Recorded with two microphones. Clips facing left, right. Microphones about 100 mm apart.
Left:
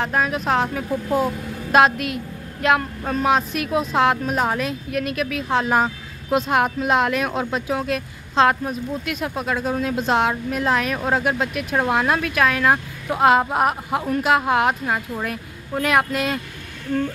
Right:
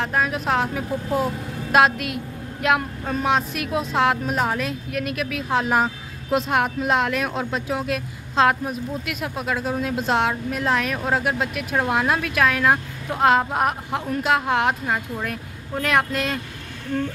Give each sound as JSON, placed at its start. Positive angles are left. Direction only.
{"t": 0.0, "sound": "speech", "side_deg": 0}